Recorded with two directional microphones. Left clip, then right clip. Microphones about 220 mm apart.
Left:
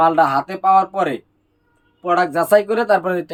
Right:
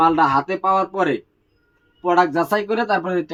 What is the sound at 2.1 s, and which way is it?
Speech, 25° left (ahead or behind).